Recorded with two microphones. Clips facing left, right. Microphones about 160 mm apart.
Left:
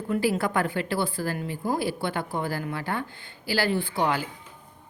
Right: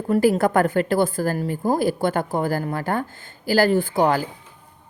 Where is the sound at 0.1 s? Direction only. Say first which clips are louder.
Right 7 dB; 45° right (ahead or behind).